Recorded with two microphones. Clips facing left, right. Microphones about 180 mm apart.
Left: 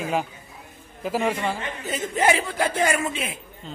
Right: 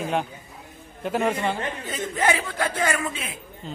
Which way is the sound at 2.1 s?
25° left (ahead or behind).